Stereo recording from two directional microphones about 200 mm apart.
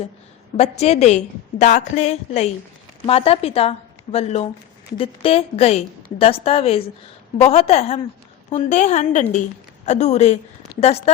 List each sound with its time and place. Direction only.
0.5 s a woman's voice: 35° left (ahead or behind)